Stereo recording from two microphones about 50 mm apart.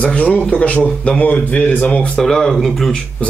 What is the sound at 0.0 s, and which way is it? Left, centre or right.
A man's voice, left.